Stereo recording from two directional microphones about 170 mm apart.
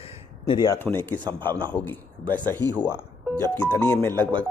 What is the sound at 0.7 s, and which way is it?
A man's voice, 10° left (ahead or behind).